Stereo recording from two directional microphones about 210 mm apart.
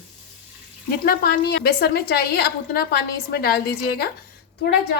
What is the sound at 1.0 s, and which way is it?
A woman's voice, 50° left (ahead or behind).